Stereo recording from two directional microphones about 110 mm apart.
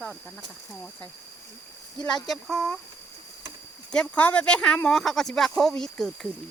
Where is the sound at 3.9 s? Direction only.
10° left (ahead or behind).